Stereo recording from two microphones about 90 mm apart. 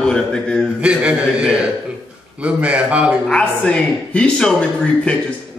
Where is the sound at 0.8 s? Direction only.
10° right (ahead or behind).